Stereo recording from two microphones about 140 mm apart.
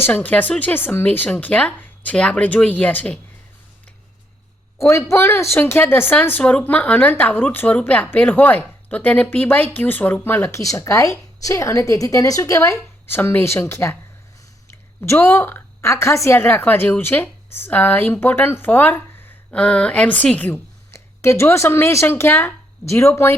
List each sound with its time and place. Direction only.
0.0 s a woman's voice: 10° left (ahead or behind)
4.8 s a woman's voice: 20° left (ahead or behind)
15.0 s a woman's voice: 20° left (ahead or behind)